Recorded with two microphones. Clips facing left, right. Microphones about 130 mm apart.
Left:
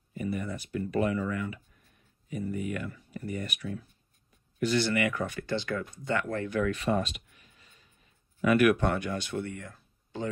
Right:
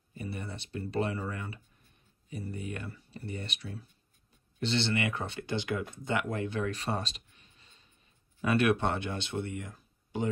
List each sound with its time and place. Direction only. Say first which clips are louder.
0.1 s speech: left 6 dB; 30° right (ahead or behind)